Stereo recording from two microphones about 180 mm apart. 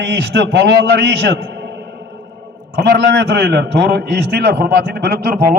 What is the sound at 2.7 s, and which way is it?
A man's voice, 65° right (ahead or behind).